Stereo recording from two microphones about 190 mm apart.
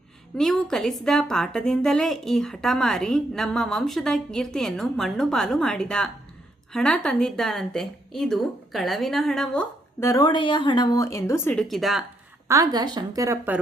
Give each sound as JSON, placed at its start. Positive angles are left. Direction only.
{"t": 0.3, "sound": "a woman's voice", "side_deg": 0}
{"t": 12.5, "sound": "a woman's voice", "side_deg": -20}